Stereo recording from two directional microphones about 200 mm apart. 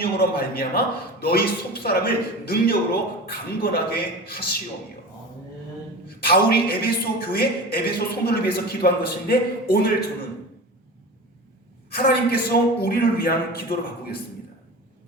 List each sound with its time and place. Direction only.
0.0 s a man's voice: 50° left (ahead or behind)
6.1 s a man's voice: 50° left (ahead or behind)
11.9 s a man's voice: 50° left (ahead or behind)